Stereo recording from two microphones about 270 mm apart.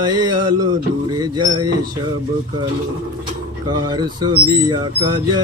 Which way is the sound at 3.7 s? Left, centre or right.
Centre.